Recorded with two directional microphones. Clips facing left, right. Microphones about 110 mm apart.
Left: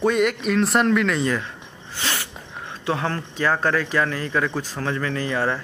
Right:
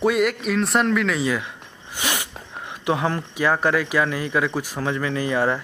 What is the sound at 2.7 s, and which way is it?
Speech, 15° right (ahead or behind).